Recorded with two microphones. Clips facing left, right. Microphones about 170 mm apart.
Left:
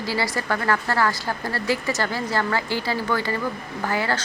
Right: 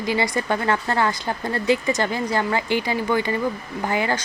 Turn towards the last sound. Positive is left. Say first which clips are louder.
# right 2 dB
turn(degrees=-20)  # may be behind; listen again after turning